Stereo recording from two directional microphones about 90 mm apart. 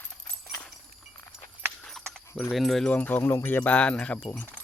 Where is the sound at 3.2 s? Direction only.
30° left (ahead or behind); by 4.2 s 10° left (ahead or behind).